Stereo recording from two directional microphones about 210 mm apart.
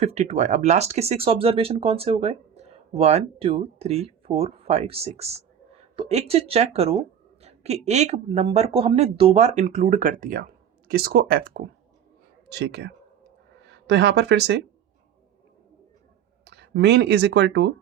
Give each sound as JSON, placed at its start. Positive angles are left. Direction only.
{"t": 0.0, "sound": "speech", "side_deg": -30}
{"t": 16.4, "sound": "speech", "side_deg": -50}